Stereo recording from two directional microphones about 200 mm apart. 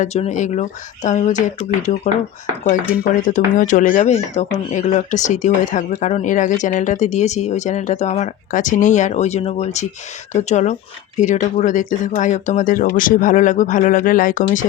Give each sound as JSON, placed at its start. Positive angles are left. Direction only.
{"t": 0.0, "sound": "speech", "side_deg": 35}
{"t": 3.2, "sound": "speech", "side_deg": 40}